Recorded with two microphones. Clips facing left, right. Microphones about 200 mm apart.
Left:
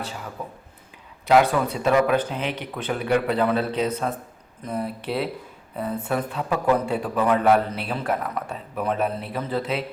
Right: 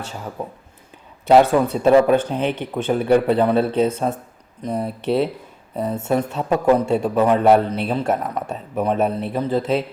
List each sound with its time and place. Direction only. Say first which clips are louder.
0.4 s a man's voice: right 5 dB; 30° right (ahead or behind)
3.6 s speech: right 6 dB; 50° right (ahead or behind)
3.8 s speech: right 4 dB; 25° right (ahead or behind)